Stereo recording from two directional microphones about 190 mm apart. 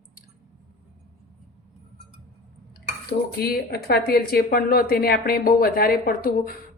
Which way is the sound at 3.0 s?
55° left (ahead or behind).